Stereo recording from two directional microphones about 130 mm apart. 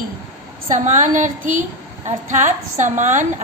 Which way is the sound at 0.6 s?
65° right (ahead or behind).